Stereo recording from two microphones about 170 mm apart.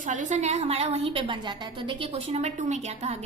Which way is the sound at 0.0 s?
45° right (ahead or behind).